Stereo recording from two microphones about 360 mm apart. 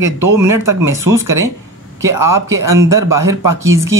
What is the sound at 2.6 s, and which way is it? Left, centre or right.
Speech, right.